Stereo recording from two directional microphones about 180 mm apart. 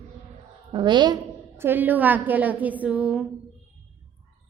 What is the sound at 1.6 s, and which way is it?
A woman's voice, 10° right (ahead or behind).